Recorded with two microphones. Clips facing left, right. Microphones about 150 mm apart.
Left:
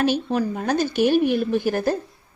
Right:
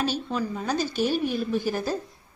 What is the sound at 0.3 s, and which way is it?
A woman's voice, 55° left (ahead or behind).